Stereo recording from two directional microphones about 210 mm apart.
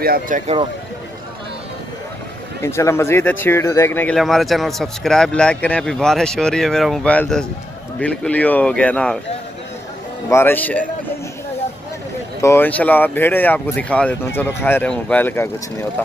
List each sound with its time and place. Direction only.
0.0 s speech: 45° right (ahead or behind)
2.6 s speech: 10° left (ahead or behind)
10.3 s speech: 10° left (ahead or behind)
12.4 s speech: 10° left (ahead or behind)